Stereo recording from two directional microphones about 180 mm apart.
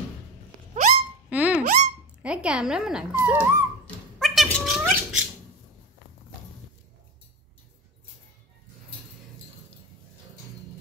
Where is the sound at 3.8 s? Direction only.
Centre (ahead or behind).